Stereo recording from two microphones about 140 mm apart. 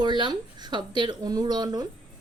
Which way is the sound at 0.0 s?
35° right (ahead or behind).